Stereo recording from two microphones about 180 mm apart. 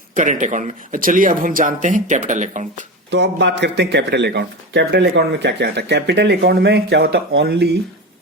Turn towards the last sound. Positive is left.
turn(degrees=-70)  # may be behind; listen again after turning